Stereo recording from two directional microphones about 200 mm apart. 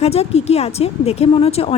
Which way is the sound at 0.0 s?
30° left (ahead or behind).